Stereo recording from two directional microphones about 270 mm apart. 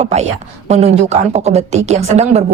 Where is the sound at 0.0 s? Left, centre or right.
Right.